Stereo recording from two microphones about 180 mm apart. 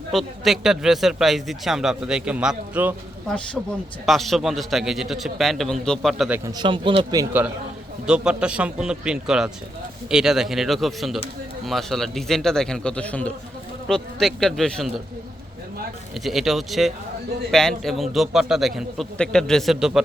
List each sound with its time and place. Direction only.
0.1 s speech: centre (ahead or behind)
3.2 s speech: 5° left (ahead or behind)
6.4 s a man's voice: 25° right (ahead or behind)
8.0 s speech: 5° right (ahead or behind)
16.2 s speech: centre (ahead or behind)